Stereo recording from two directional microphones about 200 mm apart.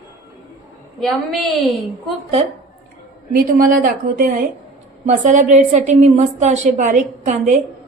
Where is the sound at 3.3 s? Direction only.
45° right (ahead or behind).